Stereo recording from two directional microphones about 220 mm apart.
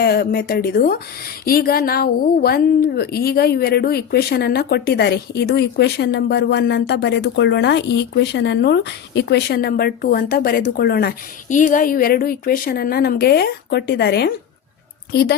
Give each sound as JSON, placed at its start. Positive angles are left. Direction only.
{"t": 0.0, "sound": "a woman's voice", "side_deg": 45}